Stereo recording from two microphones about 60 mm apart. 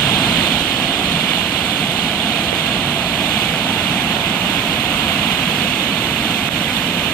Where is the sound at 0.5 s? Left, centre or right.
Left.